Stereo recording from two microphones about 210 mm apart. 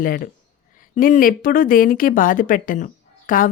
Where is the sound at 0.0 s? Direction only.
40° left (ahead or behind).